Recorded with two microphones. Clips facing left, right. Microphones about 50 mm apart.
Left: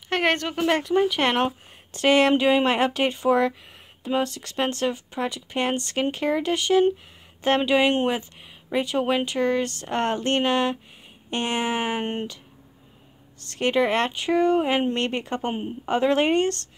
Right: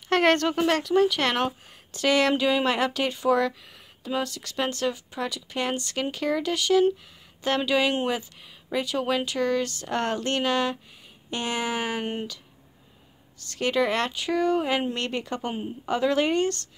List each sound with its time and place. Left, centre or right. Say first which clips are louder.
0.1 s speech: right 2 dB; centre
0.7 s speech: even; left
1.9 s speech: left 4 dB; left
13.4 s speech: left 2 dB; left